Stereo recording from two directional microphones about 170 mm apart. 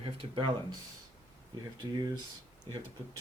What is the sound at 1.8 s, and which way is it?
Speech, 25° right (ahead or behind).